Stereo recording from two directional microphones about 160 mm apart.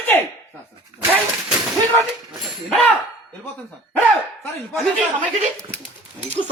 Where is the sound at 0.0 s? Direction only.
10° left (ahead or behind).